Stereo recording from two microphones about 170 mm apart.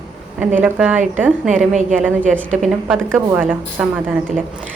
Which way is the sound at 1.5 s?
45° right (ahead or behind).